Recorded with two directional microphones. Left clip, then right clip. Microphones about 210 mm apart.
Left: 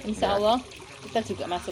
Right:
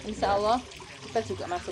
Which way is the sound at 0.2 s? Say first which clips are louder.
Left 2 dB; 35° left (ahead or behind).